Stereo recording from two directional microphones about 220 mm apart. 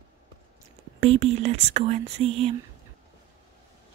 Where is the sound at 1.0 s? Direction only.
25° right (ahead or behind).